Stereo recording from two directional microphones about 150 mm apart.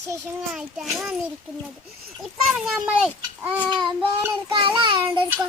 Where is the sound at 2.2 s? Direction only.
Centre (ahead or behind).